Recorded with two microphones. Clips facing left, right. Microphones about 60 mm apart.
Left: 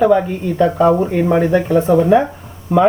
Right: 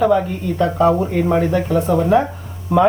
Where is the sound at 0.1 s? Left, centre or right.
Left.